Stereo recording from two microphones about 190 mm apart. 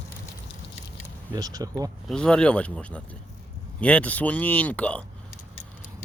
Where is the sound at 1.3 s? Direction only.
20° right (ahead or behind).